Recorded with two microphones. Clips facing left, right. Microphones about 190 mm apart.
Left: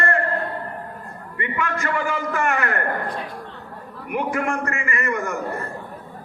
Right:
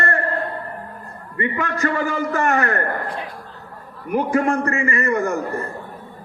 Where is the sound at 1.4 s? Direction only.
35° right (ahead or behind).